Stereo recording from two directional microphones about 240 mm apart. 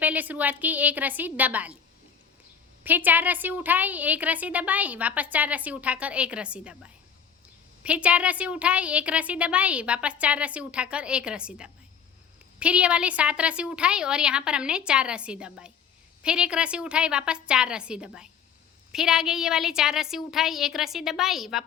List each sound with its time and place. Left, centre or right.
0.0 s a woman's voice: centre
2.8 s a woman's voice: centre
7.9 s a woman's voice: centre